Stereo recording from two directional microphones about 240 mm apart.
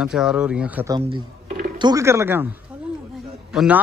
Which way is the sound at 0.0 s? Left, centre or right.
Centre.